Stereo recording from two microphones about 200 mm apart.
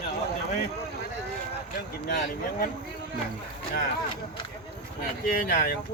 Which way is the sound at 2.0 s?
45° left (ahead or behind).